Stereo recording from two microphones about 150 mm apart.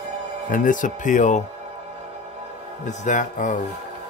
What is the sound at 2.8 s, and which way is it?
Speech, 55° left (ahead or behind).